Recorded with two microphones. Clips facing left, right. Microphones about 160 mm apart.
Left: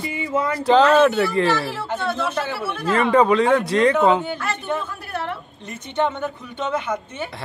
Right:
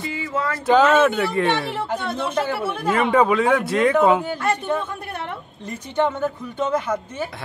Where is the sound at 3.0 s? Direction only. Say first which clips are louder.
Left 2 dB; 5° right (ahead or behind).